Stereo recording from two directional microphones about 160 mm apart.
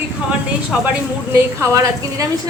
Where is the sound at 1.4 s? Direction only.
15° right (ahead or behind).